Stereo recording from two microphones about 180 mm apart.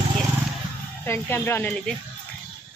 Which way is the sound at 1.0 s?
15° left (ahead or behind).